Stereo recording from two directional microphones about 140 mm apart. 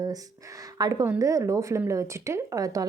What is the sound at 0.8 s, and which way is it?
Speech, 25° right (ahead or behind).